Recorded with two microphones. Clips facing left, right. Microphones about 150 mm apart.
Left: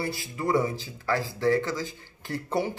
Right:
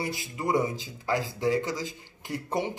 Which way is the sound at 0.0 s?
20° right (ahead or behind).